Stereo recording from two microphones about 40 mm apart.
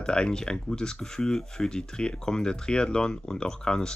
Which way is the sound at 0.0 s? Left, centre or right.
Left.